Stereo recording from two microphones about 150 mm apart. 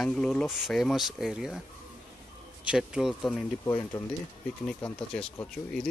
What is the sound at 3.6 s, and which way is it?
Speech, 25° left (ahead or behind).